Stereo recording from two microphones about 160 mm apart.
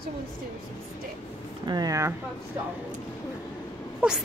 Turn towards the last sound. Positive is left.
turn(degrees=-10)  # may be behind; listen again after turning